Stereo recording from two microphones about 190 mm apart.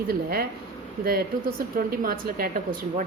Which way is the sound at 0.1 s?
50° right (ahead or behind).